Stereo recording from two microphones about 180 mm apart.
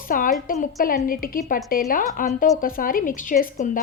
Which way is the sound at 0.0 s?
50° left (ahead or behind).